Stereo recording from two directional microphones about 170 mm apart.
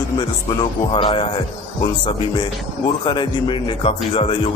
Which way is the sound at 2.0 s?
30° left (ahead or behind).